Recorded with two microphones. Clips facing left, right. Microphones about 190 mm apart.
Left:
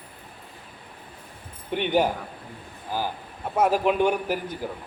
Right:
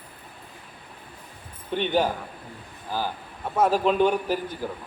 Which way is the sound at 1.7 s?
15° left (ahead or behind).